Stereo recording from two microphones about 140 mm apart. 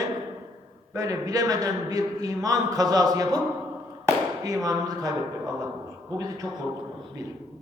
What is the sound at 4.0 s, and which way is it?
Firecracker, 25° right (ahead or behind).